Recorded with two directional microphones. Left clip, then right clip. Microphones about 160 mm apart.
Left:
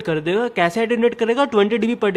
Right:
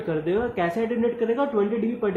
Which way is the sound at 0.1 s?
30° left (ahead or behind).